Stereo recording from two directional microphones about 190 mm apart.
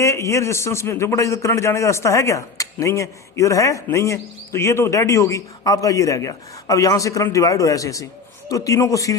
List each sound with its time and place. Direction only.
0.0 s a man's voice: 15° left (ahead or behind)